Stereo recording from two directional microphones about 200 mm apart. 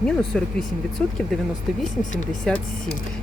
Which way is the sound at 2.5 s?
5° left (ahead or behind).